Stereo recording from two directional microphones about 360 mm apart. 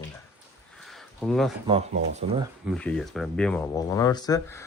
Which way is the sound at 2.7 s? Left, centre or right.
Centre.